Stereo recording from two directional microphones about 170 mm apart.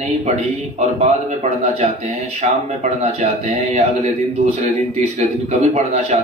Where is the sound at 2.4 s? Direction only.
40° right (ahead or behind).